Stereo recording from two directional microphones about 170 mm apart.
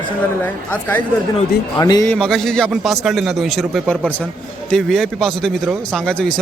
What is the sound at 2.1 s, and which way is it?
A man's voice, 5° left (ahead or behind).